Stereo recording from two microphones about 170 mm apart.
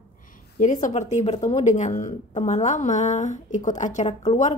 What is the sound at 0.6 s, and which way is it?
A woman's voice, 50° left (ahead or behind).